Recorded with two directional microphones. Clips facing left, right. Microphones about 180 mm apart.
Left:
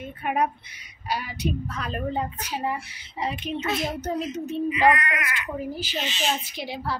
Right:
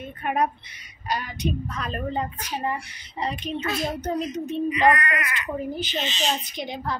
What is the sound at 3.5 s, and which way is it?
Speech, 25° left (ahead or behind).